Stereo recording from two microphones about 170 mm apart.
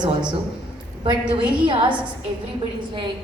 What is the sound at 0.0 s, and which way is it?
Speech, 25° right (ahead or behind).